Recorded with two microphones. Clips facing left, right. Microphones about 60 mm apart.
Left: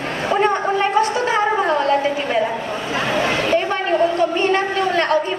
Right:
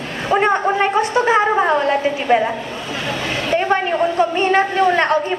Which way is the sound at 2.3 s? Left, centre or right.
Right.